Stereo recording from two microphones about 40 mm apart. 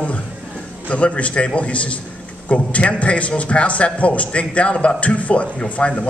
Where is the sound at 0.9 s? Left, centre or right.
Left.